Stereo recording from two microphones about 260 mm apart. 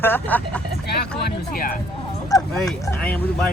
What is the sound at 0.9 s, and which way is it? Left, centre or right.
Speech, left.